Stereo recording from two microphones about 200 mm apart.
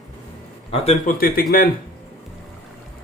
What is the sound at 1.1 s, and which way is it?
Speech, 45° left (ahead or behind).